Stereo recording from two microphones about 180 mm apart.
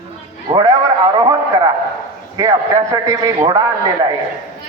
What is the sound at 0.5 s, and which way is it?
A man's voice, 20° right (ahead or behind).